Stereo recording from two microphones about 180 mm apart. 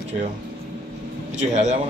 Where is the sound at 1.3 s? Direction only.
40° right (ahead or behind).